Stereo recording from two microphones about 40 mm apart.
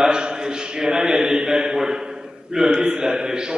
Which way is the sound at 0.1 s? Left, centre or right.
Right.